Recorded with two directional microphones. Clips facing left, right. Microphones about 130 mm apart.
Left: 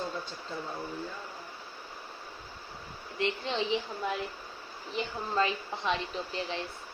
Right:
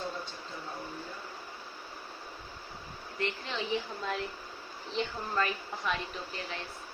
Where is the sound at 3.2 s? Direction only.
25° left (ahead or behind).